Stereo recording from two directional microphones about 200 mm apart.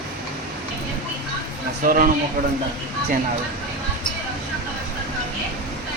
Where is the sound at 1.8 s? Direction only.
45° right (ahead or behind).